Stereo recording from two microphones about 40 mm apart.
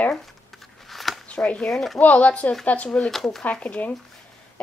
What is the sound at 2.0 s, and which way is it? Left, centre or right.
Speech, left.